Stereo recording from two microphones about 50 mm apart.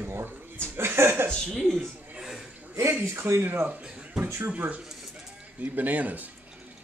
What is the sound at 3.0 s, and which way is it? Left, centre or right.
Speech, right.